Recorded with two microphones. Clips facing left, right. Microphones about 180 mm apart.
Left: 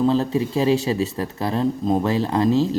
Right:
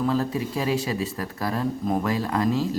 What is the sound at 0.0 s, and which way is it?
Speech, 25° left (ahead or behind).